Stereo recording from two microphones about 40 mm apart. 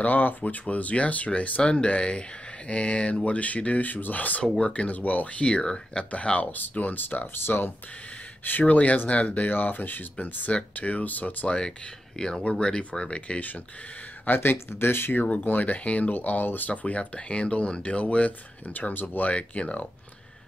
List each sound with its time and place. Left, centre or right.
0.0 s speech: left
1.6 s speech: left
4.6 s speech: left
6.5 s speech: left
7.4 s speech: left
8.5 s speech: left
9.5 s speech: left
10.7 s speech: left
11.4 s speech: left
14.2 s speech: left
15.2 s speech: left
16.1 s speech: left
19.3 s speech: left